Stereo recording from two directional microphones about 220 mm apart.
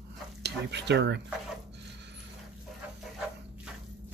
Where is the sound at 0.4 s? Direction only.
50° right (ahead or behind).